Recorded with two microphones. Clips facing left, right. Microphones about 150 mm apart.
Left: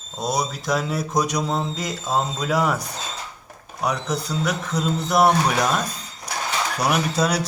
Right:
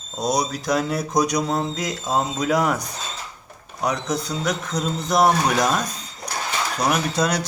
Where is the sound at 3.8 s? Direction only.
5° left (ahead or behind).